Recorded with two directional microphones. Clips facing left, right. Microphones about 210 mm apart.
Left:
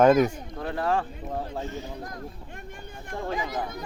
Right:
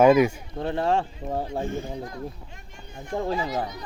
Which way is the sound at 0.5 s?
25° right (ahead or behind).